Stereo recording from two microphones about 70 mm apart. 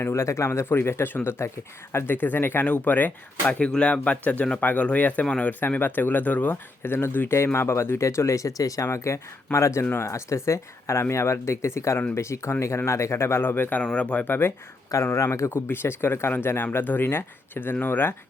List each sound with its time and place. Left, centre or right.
0.0 s speech: left
3.4 s speech: centre
5.2 s speech: centre
5.5 s speech: left
15.0 s speech: left